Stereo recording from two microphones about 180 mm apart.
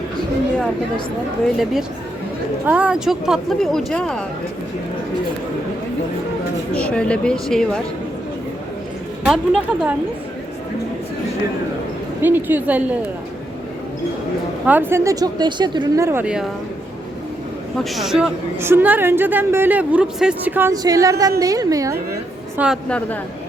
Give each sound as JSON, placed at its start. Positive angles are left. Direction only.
{"t": 2.6, "sound": "speech", "side_deg": -5}
{"t": 6.7, "sound": "speech", "side_deg": 5}
{"t": 9.2, "sound": "speech", "side_deg": 0}
{"t": 12.2, "sound": "a woman's voice", "side_deg": -10}
{"t": 14.6, "sound": "a woman's voice", "side_deg": -10}
{"t": 17.7, "sound": "a woman's voice", "side_deg": 0}
{"t": 22.5, "sound": "speech", "side_deg": -5}
{"t": 22.9, "sound": "a woman's voice", "side_deg": 10}